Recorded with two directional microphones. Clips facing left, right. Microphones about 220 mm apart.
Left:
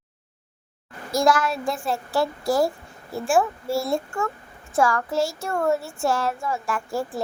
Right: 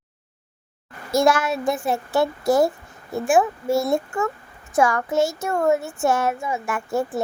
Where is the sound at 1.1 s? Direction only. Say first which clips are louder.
Right 2 dB; 25° right (ahead or behind).